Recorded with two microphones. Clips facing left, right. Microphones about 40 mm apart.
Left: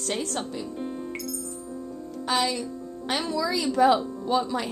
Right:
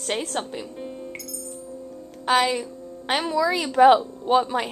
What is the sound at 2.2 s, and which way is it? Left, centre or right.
A woman's voice, right.